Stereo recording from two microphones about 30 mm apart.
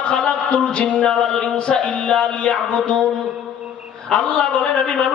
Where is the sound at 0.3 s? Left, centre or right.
Left.